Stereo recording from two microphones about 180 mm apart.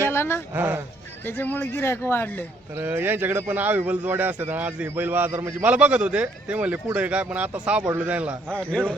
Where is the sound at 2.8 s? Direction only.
10° right (ahead or behind).